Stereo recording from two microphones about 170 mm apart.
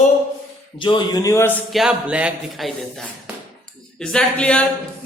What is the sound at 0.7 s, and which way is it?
Speech, 30° left (ahead or behind).